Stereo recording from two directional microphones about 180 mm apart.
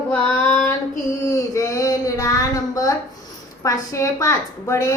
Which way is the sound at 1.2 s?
20° left (ahead or behind).